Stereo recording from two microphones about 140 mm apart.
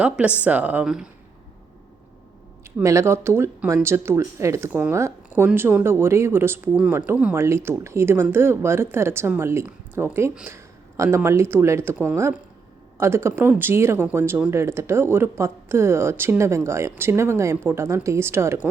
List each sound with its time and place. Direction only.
0.0 s speech: 10° right (ahead or behind)
2.8 s speech: 20° right (ahead or behind)
7.3 s speech: 20° right (ahead or behind)